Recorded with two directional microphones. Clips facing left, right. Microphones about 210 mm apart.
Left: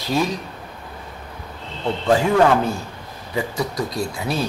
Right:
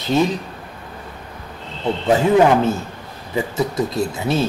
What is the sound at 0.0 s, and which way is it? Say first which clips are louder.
Speech: right 4 dB; 20° right (ahead or behind).